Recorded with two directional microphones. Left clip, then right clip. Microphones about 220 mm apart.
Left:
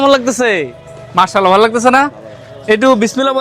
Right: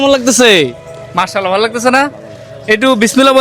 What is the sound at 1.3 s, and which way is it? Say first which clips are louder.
Speech: left 5 dB; 25° left (ahead or behind).